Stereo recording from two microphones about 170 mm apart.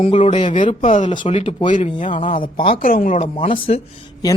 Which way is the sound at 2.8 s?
55° left (ahead or behind).